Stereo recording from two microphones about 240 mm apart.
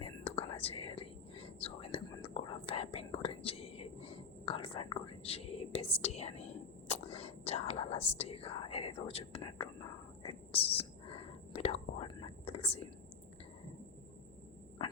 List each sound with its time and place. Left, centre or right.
0.0 s whispering: left